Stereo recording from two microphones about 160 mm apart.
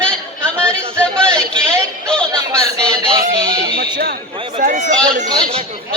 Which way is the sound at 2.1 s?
5° left (ahead or behind).